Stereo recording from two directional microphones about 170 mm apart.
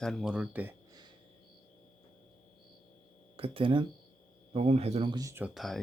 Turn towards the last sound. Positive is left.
turn(degrees=0)  # may be behind; listen again after turning